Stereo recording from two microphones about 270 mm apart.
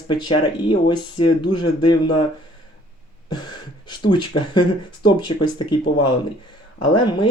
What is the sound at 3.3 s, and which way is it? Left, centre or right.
Speech, centre.